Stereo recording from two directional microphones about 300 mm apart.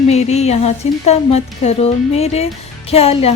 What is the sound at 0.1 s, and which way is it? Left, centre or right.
A woman's voice, left.